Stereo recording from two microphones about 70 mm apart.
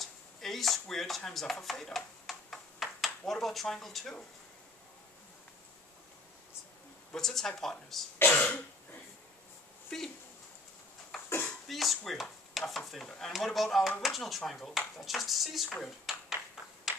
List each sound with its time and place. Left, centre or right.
0.0 s chopping: centre
7.1 s speech: centre
8.3 s throat clearing: centre
9.8 s speech: centre
11.2 s a sound: left
11.6 s speech: centre
16.6 s a sound: centre